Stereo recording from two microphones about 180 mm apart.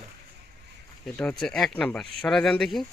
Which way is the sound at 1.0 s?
5° left (ahead or behind).